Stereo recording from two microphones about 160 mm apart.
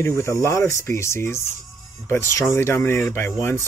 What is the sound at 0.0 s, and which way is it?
Speech, 15° left (ahead or behind).